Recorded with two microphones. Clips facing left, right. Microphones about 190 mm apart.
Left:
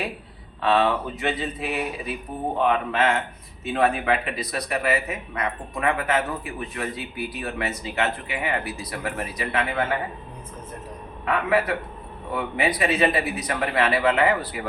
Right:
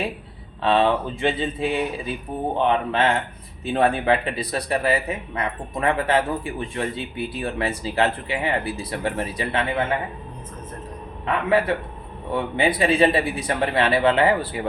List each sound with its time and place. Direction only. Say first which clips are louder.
0.6 s speech: right 2 dB; 30° right (ahead or behind)
11.4 s speech: right 4 dB; 30° right (ahead or behind)